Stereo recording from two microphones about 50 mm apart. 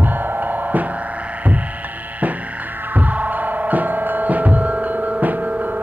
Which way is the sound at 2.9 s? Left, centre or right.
Right.